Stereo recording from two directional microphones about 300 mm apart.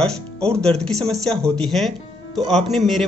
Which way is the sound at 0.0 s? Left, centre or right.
Centre.